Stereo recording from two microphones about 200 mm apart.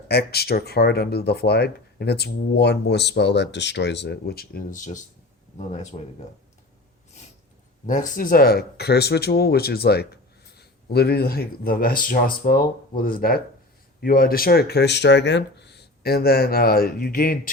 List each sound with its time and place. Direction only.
0.1 s speech: 55° left (ahead or behind); by 6.0 s 35° left (ahead or behind)
7.9 s speech: 40° left (ahead or behind)